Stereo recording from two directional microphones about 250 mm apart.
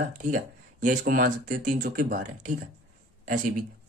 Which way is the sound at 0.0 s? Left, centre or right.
Right.